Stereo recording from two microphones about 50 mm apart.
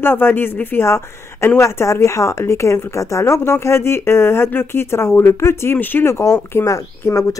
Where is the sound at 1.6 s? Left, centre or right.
Left.